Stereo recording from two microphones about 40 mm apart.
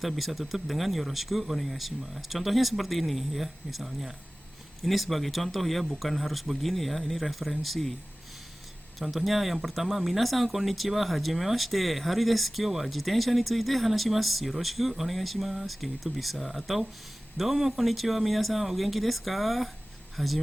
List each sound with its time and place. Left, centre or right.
0.2 s speech: centre
9.0 s speech: centre